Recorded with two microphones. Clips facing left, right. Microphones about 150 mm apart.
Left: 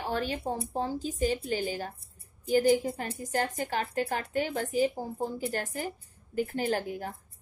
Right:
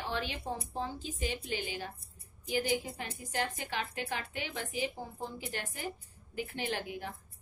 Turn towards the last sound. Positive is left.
turn(degrees=45)  # may be behind; listen again after turning